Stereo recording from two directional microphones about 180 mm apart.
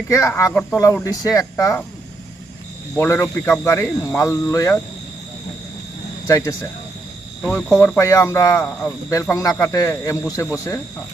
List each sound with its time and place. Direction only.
0.1 s speech: 15° left (ahead or behind)
2.9 s speech: 10° left (ahead or behind)
6.2 s speech: 15° left (ahead or behind)